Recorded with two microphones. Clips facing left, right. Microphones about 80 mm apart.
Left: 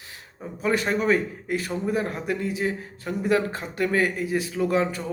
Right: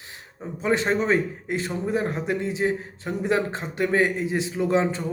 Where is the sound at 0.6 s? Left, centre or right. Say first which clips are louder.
Right 1 dB; right.